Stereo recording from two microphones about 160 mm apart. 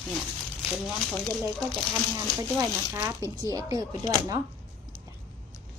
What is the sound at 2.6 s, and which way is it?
Speech, 20° right (ahead or behind).